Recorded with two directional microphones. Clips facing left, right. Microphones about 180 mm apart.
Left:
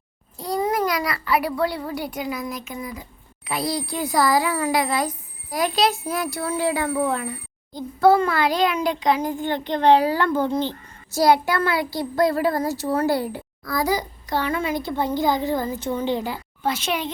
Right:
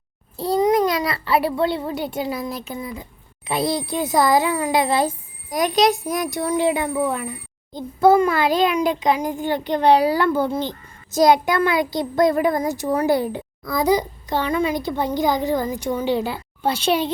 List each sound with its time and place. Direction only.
0.3 s babbling: 30° right (ahead or behind)
0.6 s a child's voice: 20° right (ahead or behind)
16.6 s a child's voice: 30° right (ahead or behind)